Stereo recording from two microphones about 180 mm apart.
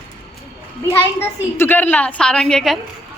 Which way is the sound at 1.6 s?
10° left (ahead or behind).